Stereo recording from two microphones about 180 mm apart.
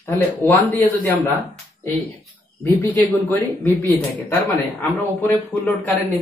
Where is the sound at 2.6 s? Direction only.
15° left (ahead or behind).